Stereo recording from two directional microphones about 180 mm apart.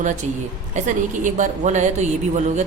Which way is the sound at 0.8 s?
45° right (ahead or behind).